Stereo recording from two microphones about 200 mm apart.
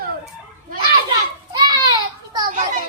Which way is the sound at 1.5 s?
20° right (ahead or behind).